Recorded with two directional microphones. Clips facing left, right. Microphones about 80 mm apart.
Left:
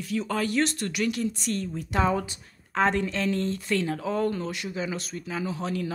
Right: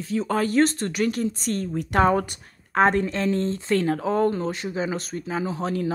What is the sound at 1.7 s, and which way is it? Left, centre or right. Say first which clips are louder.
Speech: right 6 dB; right.